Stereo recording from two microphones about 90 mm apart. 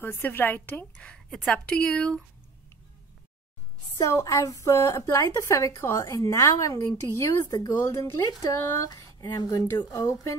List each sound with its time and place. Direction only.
0.0 s a woman's voice: 25° left (ahead or behind); by 2.2 s 5° left (ahead or behind)
4.0 s a woman's voice: 35° left (ahead or behind)